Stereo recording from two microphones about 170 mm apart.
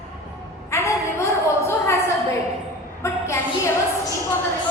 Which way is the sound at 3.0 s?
15° left (ahead or behind).